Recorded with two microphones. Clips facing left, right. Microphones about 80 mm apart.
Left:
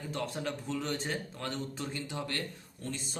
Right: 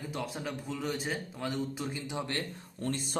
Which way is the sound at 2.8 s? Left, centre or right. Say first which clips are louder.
Right 6 dB; right.